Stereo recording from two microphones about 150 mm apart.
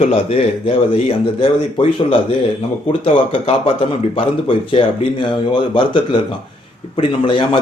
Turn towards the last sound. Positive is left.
turn(degrees=35)  # may be behind; listen again after turning